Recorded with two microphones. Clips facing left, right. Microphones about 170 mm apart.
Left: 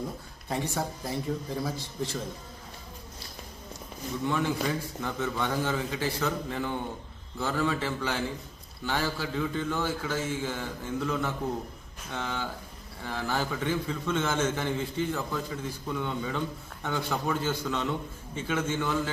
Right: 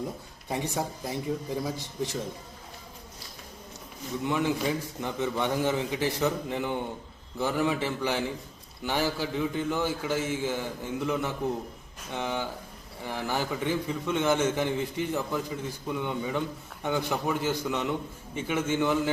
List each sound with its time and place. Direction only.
0.4 s a man's voice: 15° right (ahead or behind)
4.3 s a man's voice: 15° right (ahead or behind)